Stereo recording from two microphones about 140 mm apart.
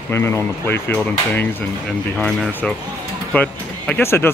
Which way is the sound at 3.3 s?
10° left (ahead or behind).